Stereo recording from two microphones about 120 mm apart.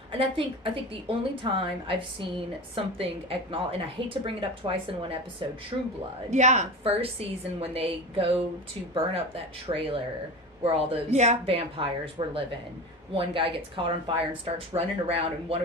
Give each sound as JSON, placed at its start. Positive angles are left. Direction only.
{"t": 0.1, "sound": "a woman's voice", "side_deg": -50}
{"t": 6.3, "sound": "a woman's voice", "side_deg": -80}
{"t": 6.8, "sound": "a woman's voice", "side_deg": -55}
{"t": 11.4, "sound": "a woman's voice", "side_deg": -50}